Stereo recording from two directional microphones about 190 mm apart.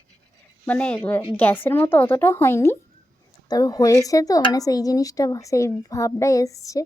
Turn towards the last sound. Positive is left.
turn(degrees=15)  # may be behind; listen again after turning